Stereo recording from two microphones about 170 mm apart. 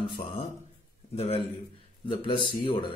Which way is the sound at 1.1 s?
35° left (ahead or behind).